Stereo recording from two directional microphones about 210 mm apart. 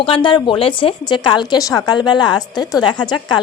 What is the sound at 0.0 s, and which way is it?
Speech, 25° left (ahead or behind).